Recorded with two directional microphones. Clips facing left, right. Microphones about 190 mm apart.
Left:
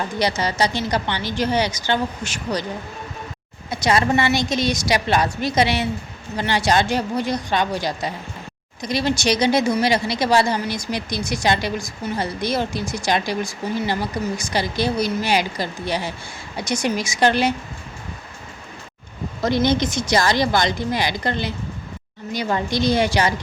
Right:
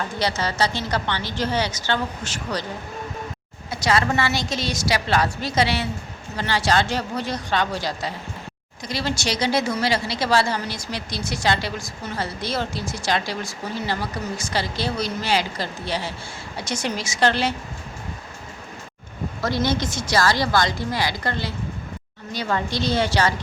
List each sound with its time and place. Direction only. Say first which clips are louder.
0.2 s speech: left 2 dB; 15° left (ahead or behind)
3.7 s speech: left 3 dB; 20° left (ahead or behind)
19.6 s a woman's voice: left 4 dB; 20° left (ahead or behind)